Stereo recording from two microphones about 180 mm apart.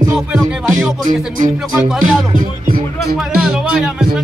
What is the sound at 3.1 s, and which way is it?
Music, 5° right (ahead or behind).